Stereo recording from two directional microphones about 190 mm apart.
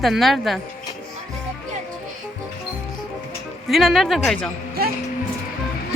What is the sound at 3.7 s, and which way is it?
Speech, centre (ahead or behind).